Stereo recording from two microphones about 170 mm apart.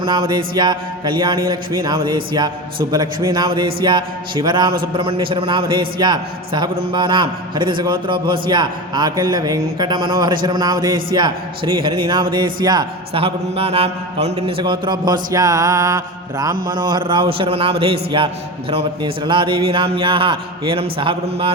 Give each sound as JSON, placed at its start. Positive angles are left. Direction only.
{"t": 0.0, "sound": "a man's voice", "side_deg": -25}
{"t": 14.6, "sound": "a man's voice", "side_deg": -25}